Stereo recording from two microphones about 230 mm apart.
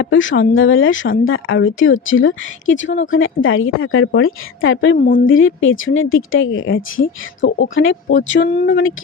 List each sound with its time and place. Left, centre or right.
0.0 s speech: left
4.9 s a woman's voice: left
5.2 s speech: left